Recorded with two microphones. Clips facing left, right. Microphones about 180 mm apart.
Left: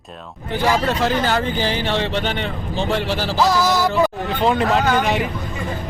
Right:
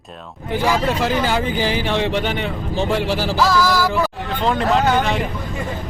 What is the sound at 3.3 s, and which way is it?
Music, 20° left (ahead or behind).